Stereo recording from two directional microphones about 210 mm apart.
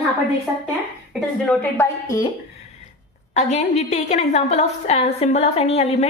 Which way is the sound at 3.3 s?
35° left (ahead or behind).